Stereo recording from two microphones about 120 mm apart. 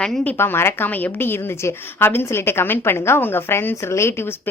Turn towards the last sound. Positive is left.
turn(degrees=20)  # may be behind; listen again after turning